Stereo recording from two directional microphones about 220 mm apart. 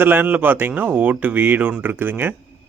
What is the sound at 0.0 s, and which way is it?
Speech, 10° right (ahead or behind).